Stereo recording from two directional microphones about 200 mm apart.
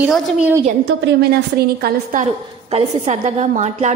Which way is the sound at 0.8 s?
55° right (ahead or behind).